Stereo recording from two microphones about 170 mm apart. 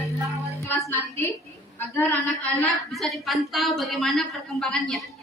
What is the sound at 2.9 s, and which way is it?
Speech, centre (ahead or behind).